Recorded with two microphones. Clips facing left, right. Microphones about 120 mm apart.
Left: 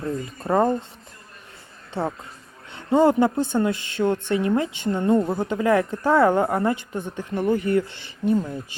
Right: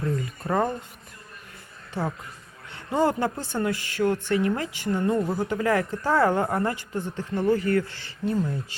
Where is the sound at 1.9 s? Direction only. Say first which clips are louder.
Left 3 dB; 25° left (ahead or behind).